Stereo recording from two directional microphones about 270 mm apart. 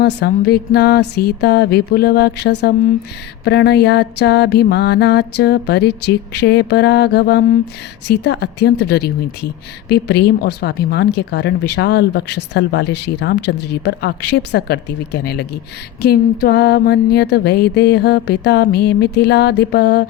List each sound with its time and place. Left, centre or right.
0.0 s mantra: left